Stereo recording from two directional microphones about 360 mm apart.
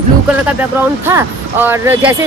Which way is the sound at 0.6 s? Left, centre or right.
Centre.